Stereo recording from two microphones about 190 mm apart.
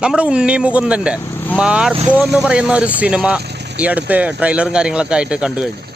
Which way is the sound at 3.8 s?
10° right (ahead or behind).